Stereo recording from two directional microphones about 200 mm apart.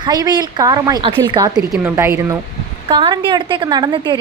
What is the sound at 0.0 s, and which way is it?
A woman's voice, 20° right (ahead or behind).